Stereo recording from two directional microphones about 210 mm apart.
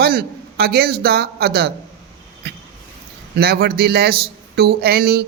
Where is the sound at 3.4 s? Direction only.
50° right (ahead or behind).